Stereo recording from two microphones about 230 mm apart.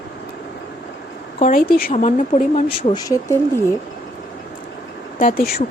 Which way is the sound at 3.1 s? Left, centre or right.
Centre.